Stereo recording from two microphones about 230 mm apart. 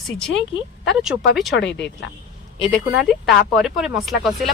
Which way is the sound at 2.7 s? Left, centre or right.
Centre.